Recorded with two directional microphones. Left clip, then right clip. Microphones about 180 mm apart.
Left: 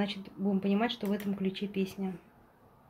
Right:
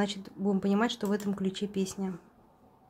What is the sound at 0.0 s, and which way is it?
Speech, 25° right (ahead or behind).